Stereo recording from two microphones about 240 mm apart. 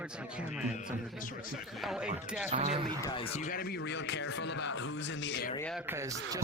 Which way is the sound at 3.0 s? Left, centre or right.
Left.